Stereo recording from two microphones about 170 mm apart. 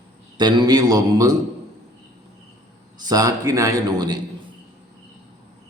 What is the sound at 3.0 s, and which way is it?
A man's voice, 20° right (ahead or behind).